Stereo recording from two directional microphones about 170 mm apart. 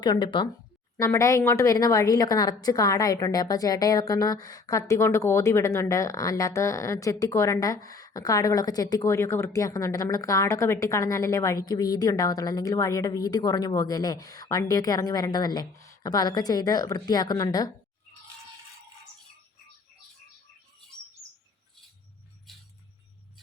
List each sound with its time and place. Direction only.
0.0 s a woman's voice: 25° left (ahead or behind)